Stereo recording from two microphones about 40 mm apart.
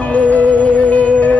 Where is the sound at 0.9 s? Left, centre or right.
Left.